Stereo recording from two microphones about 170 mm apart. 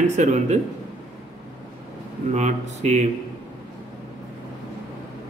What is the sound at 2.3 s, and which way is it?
Speech, 40° right (ahead or behind).